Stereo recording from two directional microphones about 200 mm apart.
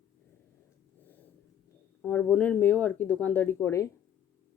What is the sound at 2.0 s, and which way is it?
A woman's voice, 10° left (ahead or behind).